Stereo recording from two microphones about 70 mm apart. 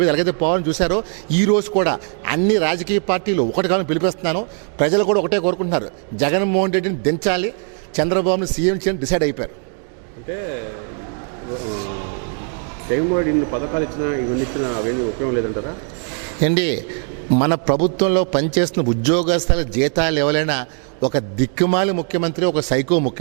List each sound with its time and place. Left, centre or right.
0.0 s speech: centre